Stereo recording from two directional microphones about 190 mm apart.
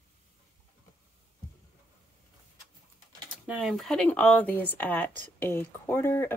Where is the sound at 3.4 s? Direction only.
5° right (ahead or behind); by 6.3 s 10° left (ahead or behind).